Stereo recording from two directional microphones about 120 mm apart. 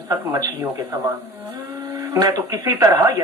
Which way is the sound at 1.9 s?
30° right (ahead or behind).